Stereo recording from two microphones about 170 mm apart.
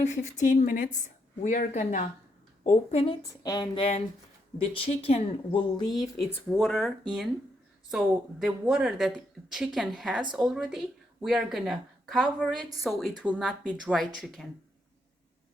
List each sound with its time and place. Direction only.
0.0 s a woman's voice: 45° left (ahead or behind)
3.4 s speech: 20° left (ahead or behind)
6.5 s a woman's voice: centre (ahead or behind)